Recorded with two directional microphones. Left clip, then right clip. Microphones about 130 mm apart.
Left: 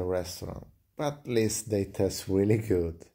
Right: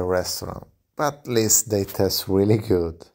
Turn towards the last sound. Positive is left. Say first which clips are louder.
# right 6 dB
turn(degrees=-40)  # may be behind; listen again after turning